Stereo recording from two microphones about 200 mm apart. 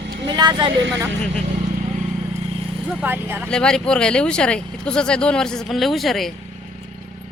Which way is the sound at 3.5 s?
5° left (ahead or behind).